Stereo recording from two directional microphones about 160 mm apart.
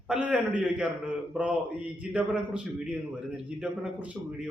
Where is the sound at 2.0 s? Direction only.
5° right (ahead or behind).